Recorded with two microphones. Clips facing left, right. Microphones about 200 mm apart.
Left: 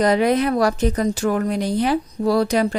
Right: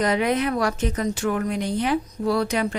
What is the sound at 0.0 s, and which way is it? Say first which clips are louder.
A woman's voice: left 5 dB; 35° left (ahead or behind).